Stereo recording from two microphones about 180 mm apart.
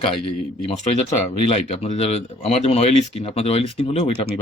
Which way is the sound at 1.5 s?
35° left (ahead or behind).